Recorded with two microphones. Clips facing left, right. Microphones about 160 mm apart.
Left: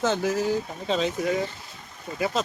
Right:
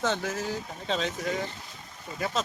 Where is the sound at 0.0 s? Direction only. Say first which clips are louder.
Left 5 dB; 5° left (ahead or behind).